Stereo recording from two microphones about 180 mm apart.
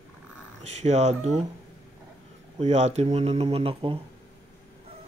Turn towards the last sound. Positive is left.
turn(degrees=-30)  # may be behind; listen again after turning